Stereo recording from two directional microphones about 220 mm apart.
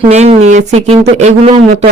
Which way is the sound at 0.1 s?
30° right (ahead or behind).